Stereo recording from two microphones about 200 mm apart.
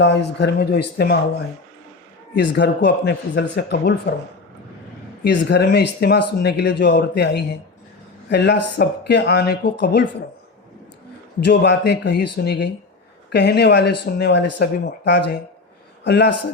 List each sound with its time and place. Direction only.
0.0 s speech: 60° left (ahead or behind)
2.3 s speech: 60° left (ahead or behind)
5.2 s speech: 55° left (ahead or behind)
11.3 s speech: 55° left (ahead or behind)